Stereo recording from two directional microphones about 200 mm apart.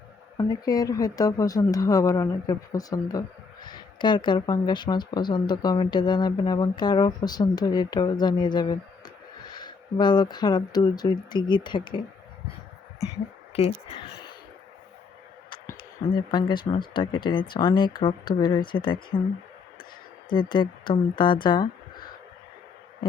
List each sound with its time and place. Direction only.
0.3 s speech: 20° left (ahead or behind)
13.5 s speech: 30° left (ahead or behind)
16.1 s speech: 20° left (ahead or behind)
20.3 s speech: 25° left (ahead or behind)